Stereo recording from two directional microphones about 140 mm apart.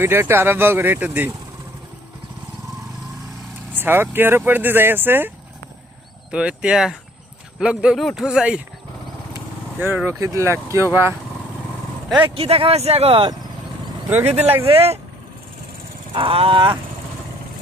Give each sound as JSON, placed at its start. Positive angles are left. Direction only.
{"t": 0.0, "sound": "speech", "side_deg": -15}
{"t": 3.8, "sound": "speech", "side_deg": -15}
{"t": 6.3, "sound": "speech", "side_deg": -5}
{"t": 9.8, "sound": "speech", "side_deg": -10}
{"t": 12.3, "sound": "speech", "side_deg": -45}
{"t": 14.1, "sound": "speech", "side_deg": -15}
{"t": 14.6, "sound": "speech", "side_deg": -45}
{"t": 16.1, "sound": "wild animals", "side_deg": -40}